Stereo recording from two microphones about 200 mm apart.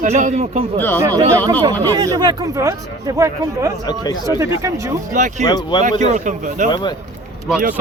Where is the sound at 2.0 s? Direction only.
20° right (ahead or behind).